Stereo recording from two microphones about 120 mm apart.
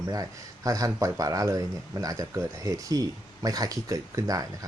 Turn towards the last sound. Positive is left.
turn(degrees=-30)  # may be behind; listen again after turning